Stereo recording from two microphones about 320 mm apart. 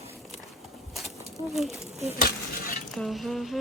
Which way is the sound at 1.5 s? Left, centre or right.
Centre.